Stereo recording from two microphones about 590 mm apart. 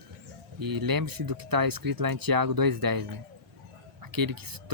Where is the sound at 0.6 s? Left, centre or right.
Right.